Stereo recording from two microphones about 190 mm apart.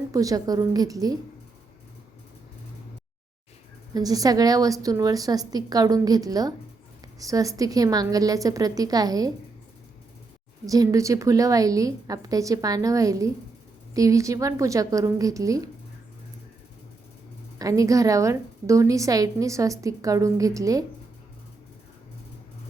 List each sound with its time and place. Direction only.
0.1 s a woman's voice: 20° right (ahead or behind)
3.9 s a woman's voice: 20° right (ahead or behind)
10.7 s a woman's voice: 15° right (ahead or behind)
17.6 s a woman's voice: 15° right (ahead or behind)